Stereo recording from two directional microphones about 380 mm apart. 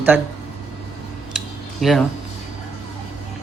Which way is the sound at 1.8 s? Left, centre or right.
Centre.